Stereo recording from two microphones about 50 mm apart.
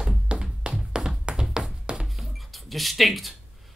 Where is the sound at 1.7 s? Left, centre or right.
Centre.